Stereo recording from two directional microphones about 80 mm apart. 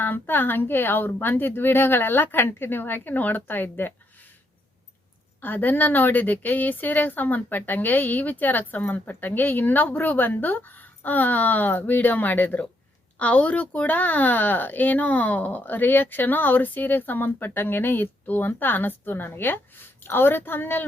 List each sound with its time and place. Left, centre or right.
0.0 s speech: left
5.4 s speech: left